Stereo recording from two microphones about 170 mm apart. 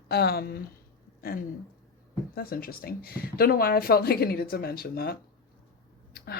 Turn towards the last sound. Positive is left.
turn(degrees=65)  # may be behind; listen again after turning